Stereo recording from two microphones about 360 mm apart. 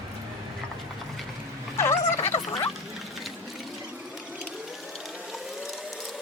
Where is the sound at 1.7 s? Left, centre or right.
Centre.